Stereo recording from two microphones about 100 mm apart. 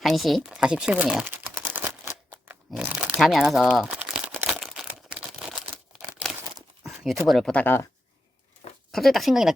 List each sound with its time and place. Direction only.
0.0 s speech: centre (ahead or behind)
1.3 s typing: 20° right (ahead or behind)
2.7 s speech: 10° right (ahead or behind)
3.8 s crumpling: 10° right (ahead or behind)
6.8 s a sound: centre (ahead or behind)
7.3 s speech: centre (ahead or behind)
7.5 s speech: 20° left (ahead or behind)
8.9 s speech: centre (ahead or behind)